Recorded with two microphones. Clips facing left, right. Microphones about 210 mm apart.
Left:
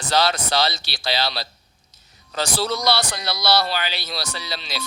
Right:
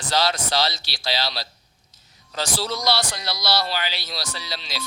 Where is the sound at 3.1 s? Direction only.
60° left (ahead or behind).